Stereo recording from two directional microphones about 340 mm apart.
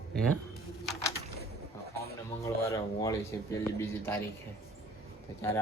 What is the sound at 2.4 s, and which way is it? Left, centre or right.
Speech, centre.